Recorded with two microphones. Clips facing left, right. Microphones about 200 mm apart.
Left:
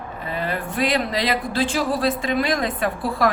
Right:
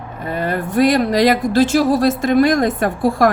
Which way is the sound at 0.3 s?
45° right (ahead or behind).